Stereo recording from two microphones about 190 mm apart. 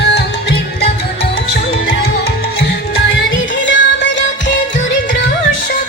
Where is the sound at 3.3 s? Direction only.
75° left (ahead or behind).